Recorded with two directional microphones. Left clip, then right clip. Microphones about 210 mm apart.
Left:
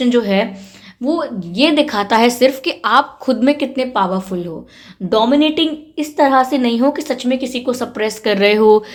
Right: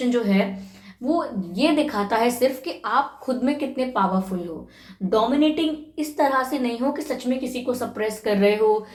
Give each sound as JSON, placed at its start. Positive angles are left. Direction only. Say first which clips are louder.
{"t": 0.1, "sound": "a woman's voice", "louder": "left 7 dB", "side_deg": 50}